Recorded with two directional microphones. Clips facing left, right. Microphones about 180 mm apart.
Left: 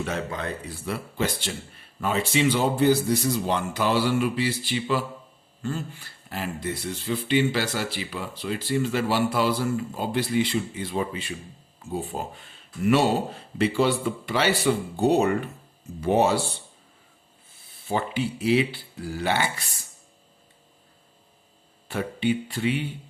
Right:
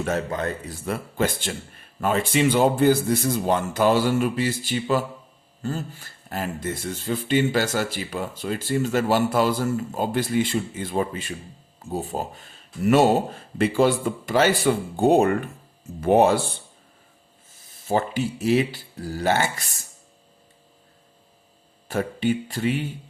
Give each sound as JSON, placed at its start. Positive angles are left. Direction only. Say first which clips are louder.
{"t": 0.0, "sound": "speech", "louder": "right 4 dB", "side_deg": -45}
{"t": 17.7, "sound": "speech", "louder": "right 3 dB", "side_deg": -40}
{"t": 21.8, "sound": "speech", "louder": "right 2 dB", "side_deg": -45}